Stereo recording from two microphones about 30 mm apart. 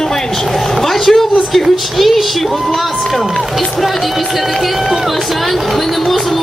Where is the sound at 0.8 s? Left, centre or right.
Centre.